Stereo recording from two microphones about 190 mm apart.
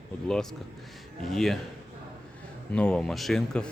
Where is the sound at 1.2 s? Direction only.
Centre (ahead or behind).